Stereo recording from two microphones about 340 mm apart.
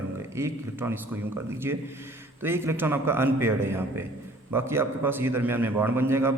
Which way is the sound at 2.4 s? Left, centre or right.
Centre.